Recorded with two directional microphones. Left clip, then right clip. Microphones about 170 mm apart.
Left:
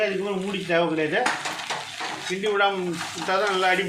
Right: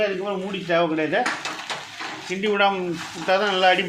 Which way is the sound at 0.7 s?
40° right (ahead or behind).